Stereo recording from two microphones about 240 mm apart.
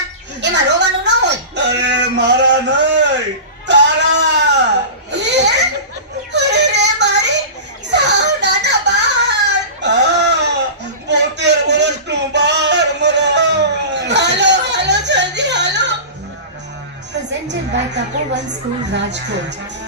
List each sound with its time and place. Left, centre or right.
0.4 s music: right
1.8 s a sound: right
6.3 s yodeling: right
7.9 s whimper: right
11.1 s a sound: right
17.5 s a woman's voice: right